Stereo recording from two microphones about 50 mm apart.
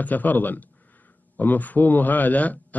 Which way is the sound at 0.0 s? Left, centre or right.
Left.